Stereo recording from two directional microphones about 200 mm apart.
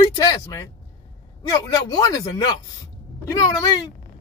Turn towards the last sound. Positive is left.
turn(degrees=20)  # may be behind; listen again after turning